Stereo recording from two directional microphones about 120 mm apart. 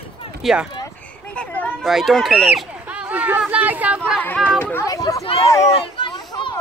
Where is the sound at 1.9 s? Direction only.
Centre (ahead or behind).